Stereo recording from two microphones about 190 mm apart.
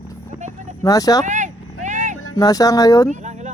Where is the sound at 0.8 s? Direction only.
20° left (ahead or behind).